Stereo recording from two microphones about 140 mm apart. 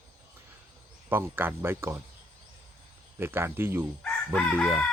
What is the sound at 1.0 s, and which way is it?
Speech, 15° right (ahead or behind).